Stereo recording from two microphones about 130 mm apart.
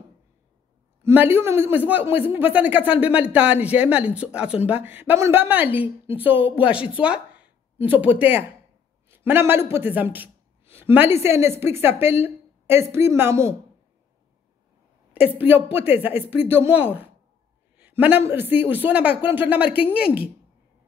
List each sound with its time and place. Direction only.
1.0 s a man's voice: 15° right (ahead or behind)
7.0 s a sound: 10° right (ahead or behind)
7.9 s a man's voice: 10° right (ahead or behind)
15.1 s a man's voice: 10° right (ahead or behind)